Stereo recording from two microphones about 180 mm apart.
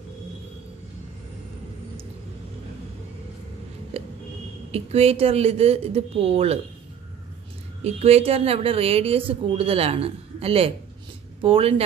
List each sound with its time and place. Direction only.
3.9 s a sound: 35° right (ahead or behind)
4.6 s a woman's voice: 35° right (ahead or behind)
7.8 s a woman's voice: 35° right (ahead or behind)